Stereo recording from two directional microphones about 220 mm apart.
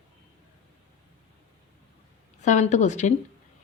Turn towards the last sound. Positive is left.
turn(degrees=30)  # may be behind; listen again after turning